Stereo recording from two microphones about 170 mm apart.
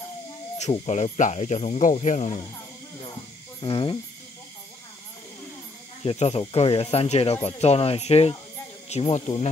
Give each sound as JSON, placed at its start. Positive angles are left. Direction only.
{"t": 0.6, "sound": "speech", "side_deg": 40}
{"t": 3.6, "sound": "speech", "side_deg": 30}
{"t": 6.0, "sound": "speech", "side_deg": 35}